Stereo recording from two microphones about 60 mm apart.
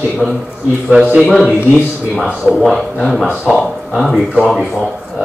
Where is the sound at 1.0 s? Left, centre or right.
Centre.